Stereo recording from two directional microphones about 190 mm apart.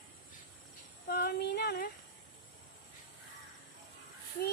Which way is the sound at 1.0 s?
55° left (ahead or behind).